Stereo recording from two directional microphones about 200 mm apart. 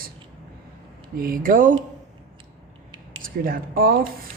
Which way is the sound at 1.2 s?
45° right (ahead or behind).